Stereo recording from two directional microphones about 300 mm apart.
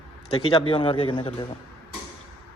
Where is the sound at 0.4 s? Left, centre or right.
Centre.